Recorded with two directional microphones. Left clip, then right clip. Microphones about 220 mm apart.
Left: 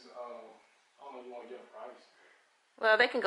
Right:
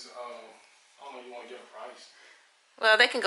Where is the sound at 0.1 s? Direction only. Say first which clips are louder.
Right 1 dB; 15° left (ahead or behind).